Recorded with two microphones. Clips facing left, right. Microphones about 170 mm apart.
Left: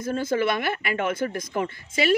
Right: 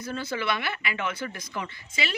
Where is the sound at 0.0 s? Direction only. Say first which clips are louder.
Left 7 dB; 50° left (ahead or behind).